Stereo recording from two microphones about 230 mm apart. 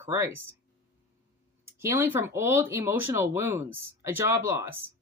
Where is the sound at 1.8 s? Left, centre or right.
Centre.